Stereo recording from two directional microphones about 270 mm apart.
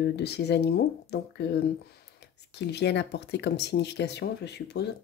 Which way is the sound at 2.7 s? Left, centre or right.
Left.